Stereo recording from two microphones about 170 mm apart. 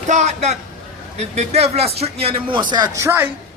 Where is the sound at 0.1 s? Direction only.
45° right (ahead or behind).